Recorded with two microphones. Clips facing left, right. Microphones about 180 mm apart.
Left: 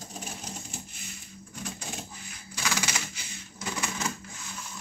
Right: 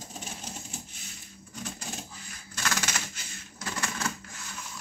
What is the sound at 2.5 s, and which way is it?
Typewriter, 5° left (ahead or behind).